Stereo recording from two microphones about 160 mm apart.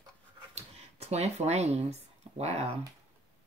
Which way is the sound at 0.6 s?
40° right (ahead or behind).